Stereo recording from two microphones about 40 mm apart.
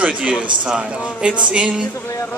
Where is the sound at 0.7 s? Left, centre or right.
Right.